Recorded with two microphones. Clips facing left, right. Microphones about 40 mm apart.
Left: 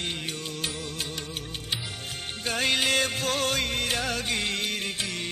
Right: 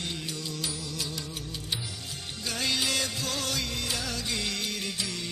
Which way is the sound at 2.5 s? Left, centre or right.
Left.